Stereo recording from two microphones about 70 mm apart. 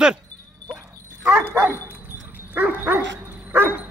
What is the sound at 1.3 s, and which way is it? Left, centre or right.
Dog, right.